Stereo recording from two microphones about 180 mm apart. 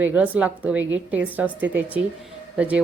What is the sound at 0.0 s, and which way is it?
Speech, 10° right (ahead or behind).